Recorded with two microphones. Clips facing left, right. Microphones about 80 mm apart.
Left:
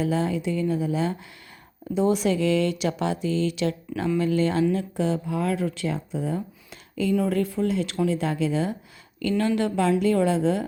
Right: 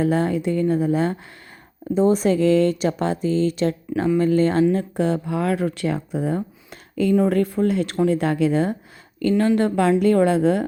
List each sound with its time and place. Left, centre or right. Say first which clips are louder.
0.0 s speech: right 5 dB; right
2.0 s speech: right 4 dB; right
9.2 s speech: right 5 dB; right